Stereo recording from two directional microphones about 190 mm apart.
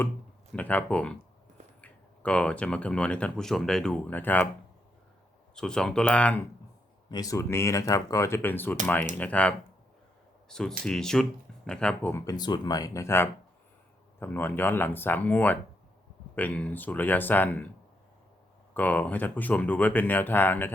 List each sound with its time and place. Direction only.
0.5 s speech: 5° left (ahead or behind)
5.5 s speech: 5° left (ahead or behind)
7.1 s speech: 20° left (ahead or behind)
18.7 s speech: 10° left (ahead or behind)